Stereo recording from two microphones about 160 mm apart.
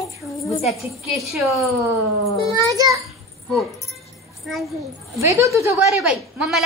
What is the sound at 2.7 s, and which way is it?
Speech, 20° right (ahead or behind).